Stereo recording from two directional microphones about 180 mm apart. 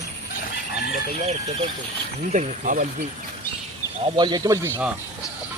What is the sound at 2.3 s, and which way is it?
Speech, 45° right (ahead or behind).